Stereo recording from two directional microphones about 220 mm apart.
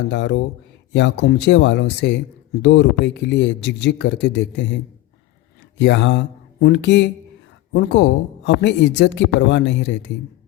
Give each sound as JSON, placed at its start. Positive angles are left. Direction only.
{"t": 0.1, "sound": "speech", "side_deg": 55}
{"t": 5.8, "sound": "speech", "side_deg": 55}